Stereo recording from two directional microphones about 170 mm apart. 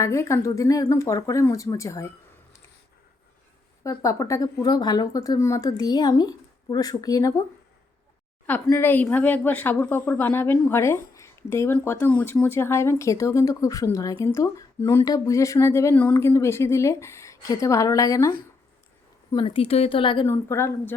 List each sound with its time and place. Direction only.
0.0 s a woman's voice: 20° left (ahead or behind)
3.8 s speech: 20° left (ahead or behind)
8.6 s a woman's voice: 15° left (ahead or behind)
19.3 s a woman's voice: 30° left (ahead or behind)
20.2 s a woman's voice: 15° left (ahead or behind)